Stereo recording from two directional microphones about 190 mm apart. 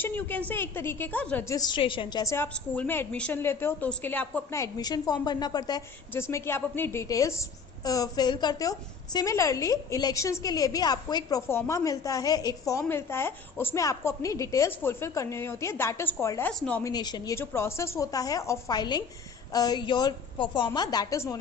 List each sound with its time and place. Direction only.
0.0 s a woman's voice: 10° left (ahead or behind)
16.8 s a woman's voice: 20° left (ahead or behind)